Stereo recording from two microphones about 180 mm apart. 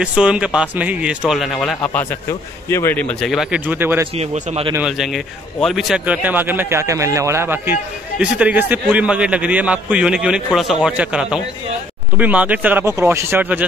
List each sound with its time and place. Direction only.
0.0 s speech: 5° right (ahead or behind)
4.1 s a man's voice: 35° right (ahead or behind)
4.7 s a man's voice: centre (ahead or behind)